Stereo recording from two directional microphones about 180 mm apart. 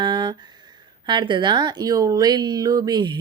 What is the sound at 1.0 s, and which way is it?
Speech, 25° right (ahead or behind).